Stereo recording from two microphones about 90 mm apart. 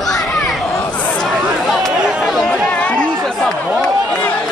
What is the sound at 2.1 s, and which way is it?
Chatter, centre (ahead or behind).